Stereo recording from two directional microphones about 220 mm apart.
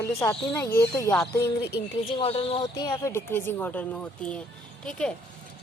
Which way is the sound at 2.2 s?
25° left (ahead or behind).